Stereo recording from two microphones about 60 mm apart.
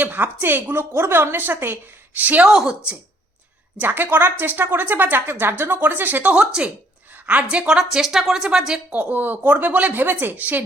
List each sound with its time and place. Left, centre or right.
0.0 s a woman's voice: right
2.1 s a woman's voice: right
2.5 s speech: centre
3.8 s speech: right
6.4 s a woman's voice: centre
7.7 s speech: centre
8.9 s a woman's voice: right